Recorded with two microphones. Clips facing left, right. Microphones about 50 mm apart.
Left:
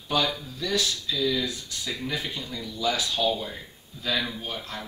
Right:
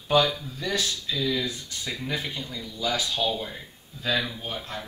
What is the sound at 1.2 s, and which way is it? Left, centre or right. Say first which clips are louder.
Speech: left 1 dB; centre.